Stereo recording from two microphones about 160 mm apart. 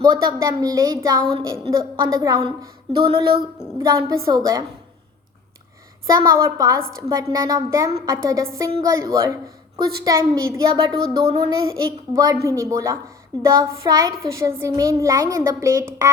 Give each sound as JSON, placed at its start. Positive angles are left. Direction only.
{"t": 0.0, "sound": "a woman's voice", "side_deg": -25}
{"t": 2.6, "sound": "music", "side_deg": -30}
{"t": 3.8, "sound": "a woman's voice", "side_deg": -25}
{"t": 6.1, "sound": "a woman's voice", "side_deg": -25}